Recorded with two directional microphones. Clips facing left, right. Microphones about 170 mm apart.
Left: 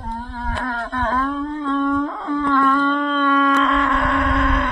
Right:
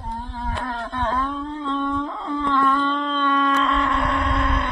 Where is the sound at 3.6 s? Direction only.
Centre (ahead or behind).